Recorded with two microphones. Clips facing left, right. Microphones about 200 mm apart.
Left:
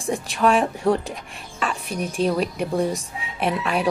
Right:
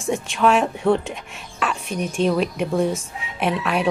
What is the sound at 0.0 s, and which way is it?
A woman's voice, centre (ahead or behind).